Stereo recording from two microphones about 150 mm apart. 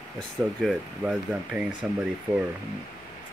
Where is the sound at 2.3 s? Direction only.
25° right (ahead or behind).